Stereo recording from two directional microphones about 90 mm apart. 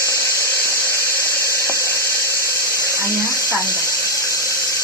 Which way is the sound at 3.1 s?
30° left (ahead or behind).